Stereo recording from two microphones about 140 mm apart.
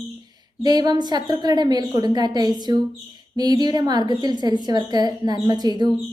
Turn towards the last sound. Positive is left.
turn(degrees=-30)  # may be behind; listen again after turning